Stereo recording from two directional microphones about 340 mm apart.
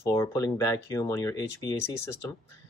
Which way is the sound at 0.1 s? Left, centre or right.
Centre.